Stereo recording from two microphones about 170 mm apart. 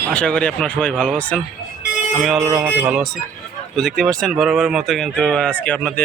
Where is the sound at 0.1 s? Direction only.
5° left (ahead or behind).